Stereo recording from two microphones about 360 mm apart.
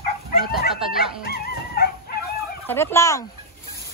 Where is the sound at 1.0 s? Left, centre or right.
Left.